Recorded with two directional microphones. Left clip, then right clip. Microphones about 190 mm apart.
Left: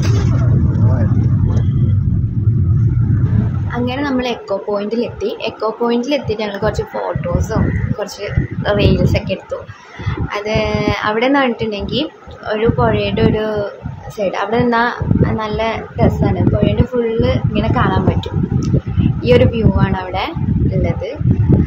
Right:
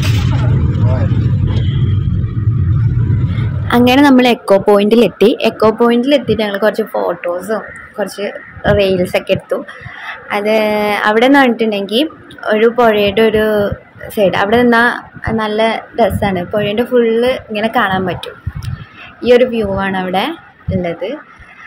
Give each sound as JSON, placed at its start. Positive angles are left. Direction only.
{"t": 3.7, "sound": "a woman's voice", "side_deg": -45}
{"t": 6.0, "sound": "a woman's voice", "side_deg": -25}
{"t": 19.2, "sound": "a woman's voice", "side_deg": -20}